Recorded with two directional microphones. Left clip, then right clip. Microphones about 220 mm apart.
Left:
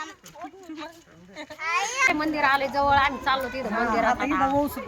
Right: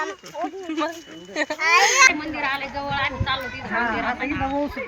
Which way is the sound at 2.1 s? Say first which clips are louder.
Left 2 dB; 20° left (ahead or behind).